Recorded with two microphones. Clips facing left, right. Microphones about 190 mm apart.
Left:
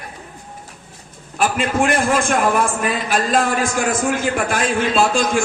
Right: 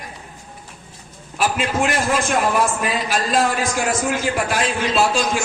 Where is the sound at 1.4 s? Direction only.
50° left (ahead or behind).